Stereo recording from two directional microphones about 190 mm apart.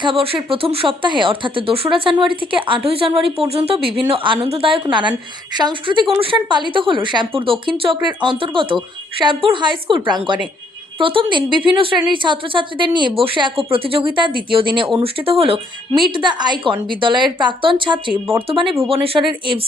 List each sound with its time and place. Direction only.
0.0 s speech: 30° right (ahead or behind)